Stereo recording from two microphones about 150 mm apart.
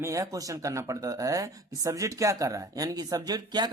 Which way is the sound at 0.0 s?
20° right (ahead or behind).